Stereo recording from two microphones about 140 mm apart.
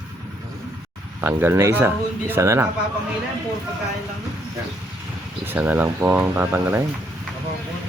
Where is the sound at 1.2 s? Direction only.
15° right (ahead or behind).